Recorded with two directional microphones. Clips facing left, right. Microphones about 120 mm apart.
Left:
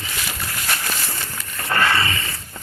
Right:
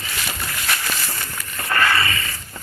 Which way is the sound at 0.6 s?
20° left (ahead or behind).